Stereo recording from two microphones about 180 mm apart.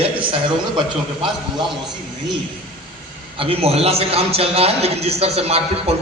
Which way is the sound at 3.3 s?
30° right (ahead or behind).